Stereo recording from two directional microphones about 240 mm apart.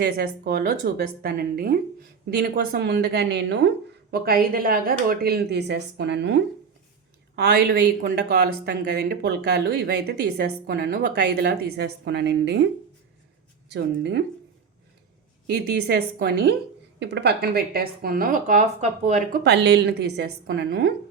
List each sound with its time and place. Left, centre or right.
0.0 s a woman's voice: right
15.4 s a woman's voice: right
19.5 s speech: right